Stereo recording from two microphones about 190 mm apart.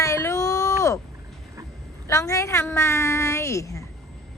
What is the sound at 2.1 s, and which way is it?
A woman's voice, 15° left (ahead or behind).